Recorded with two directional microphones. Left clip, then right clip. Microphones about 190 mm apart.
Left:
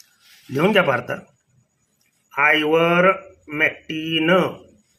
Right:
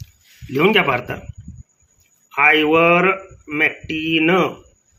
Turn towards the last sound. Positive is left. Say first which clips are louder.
# right 2 dB
turn(degrees=10)  # may be behind; listen again after turning